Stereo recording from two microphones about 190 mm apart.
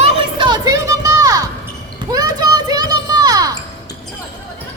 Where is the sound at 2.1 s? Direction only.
20° right (ahead or behind).